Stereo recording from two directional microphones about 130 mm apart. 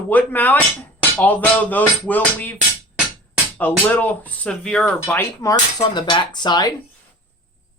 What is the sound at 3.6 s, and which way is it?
Speech, 15° left (ahead or behind).